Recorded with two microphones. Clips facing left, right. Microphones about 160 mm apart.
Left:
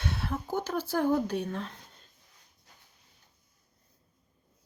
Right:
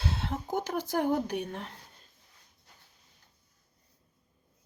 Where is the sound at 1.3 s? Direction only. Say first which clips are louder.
Left 2 dB; 15° right (ahead or behind).